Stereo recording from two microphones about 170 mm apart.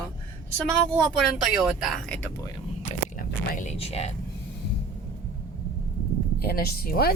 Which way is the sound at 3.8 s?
35° left (ahead or behind).